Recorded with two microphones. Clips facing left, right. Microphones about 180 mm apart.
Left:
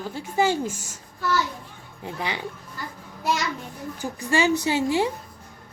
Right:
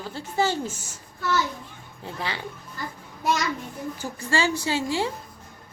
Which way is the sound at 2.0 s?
15° left (ahead or behind).